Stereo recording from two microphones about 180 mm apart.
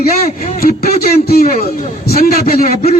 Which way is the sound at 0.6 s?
55° left (ahead or behind).